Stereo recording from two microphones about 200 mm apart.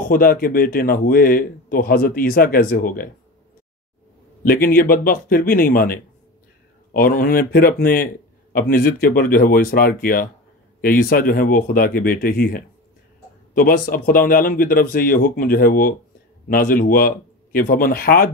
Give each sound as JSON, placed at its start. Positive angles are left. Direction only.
{"t": 0.0, "sound": "speech", "side_deg": 45}
{"t": 4.4, "sound": "speech", "side_deg": 45}